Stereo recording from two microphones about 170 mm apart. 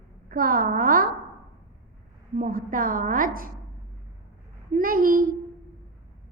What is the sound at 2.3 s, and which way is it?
A woman's voice, 55° right (ahead or behind).